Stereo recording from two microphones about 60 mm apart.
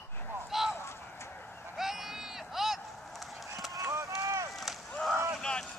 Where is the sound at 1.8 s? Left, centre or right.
Centre.